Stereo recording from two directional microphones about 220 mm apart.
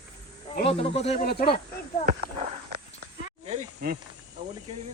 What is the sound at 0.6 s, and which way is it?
Speech, 25° left (ahead or behind).